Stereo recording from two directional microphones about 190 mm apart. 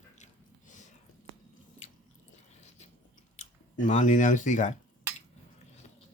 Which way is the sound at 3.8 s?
40° left (ahead or behind).